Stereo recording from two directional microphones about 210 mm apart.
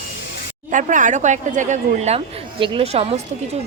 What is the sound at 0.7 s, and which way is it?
A woman's voice, 35° right (ahead or behind).